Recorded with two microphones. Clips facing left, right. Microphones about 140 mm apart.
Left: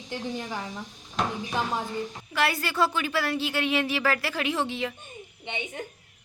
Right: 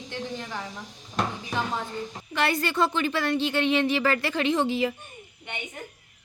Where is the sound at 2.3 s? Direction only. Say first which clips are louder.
Right 1 dB; 5° left (ahead or behind).